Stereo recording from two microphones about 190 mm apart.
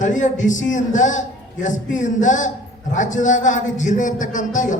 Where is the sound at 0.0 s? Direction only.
40° left (ahead or behind).